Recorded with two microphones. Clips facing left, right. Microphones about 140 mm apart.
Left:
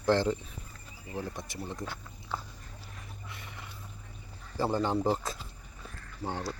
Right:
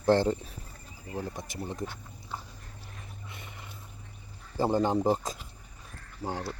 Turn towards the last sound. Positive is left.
turn(degrees=-10)  # may be behind; listen again after turning